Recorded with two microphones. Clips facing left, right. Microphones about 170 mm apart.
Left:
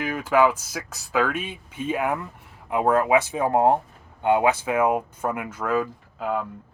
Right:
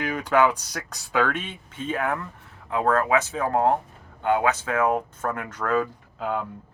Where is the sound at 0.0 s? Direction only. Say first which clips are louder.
Left 1 dB; 5° left (ahead or behind).